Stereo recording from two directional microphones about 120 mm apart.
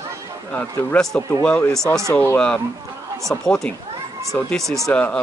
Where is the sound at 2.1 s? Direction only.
15° left (ahead or behind).